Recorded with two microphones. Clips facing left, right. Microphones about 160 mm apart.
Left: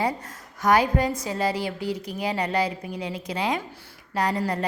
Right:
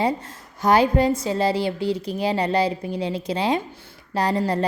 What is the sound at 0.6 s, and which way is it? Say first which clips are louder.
A woman's voice: right 3 dB; 30° right (ahead or behind).